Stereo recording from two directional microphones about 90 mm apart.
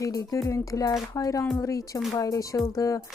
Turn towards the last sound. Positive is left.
turn(degrees=35)  # may be behind; listen again after turning